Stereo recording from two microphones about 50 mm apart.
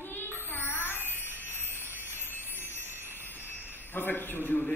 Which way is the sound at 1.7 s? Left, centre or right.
Right.